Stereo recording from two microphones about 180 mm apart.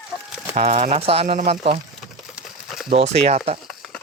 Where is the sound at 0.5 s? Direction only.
40° right (ahead or behind).